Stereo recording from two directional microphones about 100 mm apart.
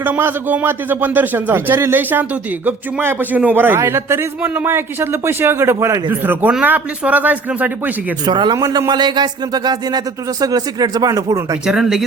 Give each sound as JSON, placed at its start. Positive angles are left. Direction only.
{"t": 0.0, "sound": "speech", "side_deg": -20}
{"t": 8.3, "sound": "music", "side_deg": -45}
{"t": 8.5, "sound": "speech", "side_deg": -40}
{"t": 8.9, "sound": "music", "side_deg": -45}
{"t": 10.4, "sound": "speech", "side_deg": -40}
{"t": 11.6, "sound": "speech", "side_deg": -5}